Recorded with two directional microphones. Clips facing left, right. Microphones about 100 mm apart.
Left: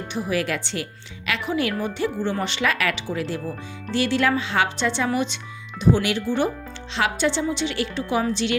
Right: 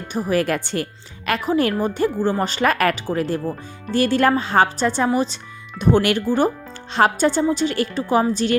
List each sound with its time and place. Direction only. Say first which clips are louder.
0.1 s a woman's voice: right 5 dB; 45° right (ahead or behind)
5.8 s speech: right 3 dB; 55° right (ahead or behind)
6.9 s a woman's voice: right 6 dB; 45° right (ahead or behind)